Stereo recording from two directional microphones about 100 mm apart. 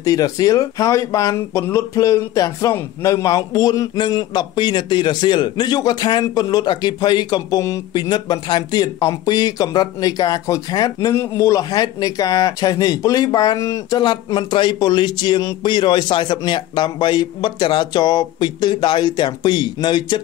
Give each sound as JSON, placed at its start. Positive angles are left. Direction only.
{"t": 0.0, "sound": "a man's voice", "side_deg": 35}
{"t": 11.1, "sound": "a man's voice", "side_deg": 30}